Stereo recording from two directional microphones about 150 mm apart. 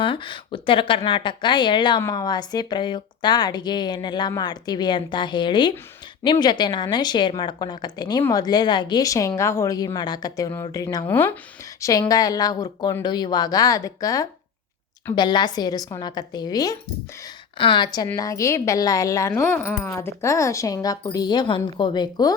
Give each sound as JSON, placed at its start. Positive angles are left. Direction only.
{"t": 0.0, "sound": "a woman's voice", "side_deg": 35}